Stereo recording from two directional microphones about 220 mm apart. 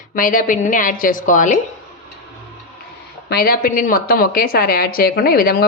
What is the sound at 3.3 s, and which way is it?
A woman's voice, 45° left (ahead or behind).